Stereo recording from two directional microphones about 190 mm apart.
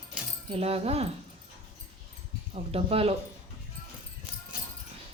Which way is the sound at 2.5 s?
30° right (ahead or behind).